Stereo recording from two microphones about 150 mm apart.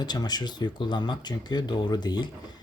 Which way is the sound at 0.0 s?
30° left (ahead or behind).